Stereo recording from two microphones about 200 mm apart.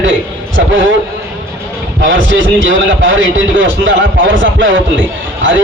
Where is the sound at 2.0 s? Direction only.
70° right (ahead or behind).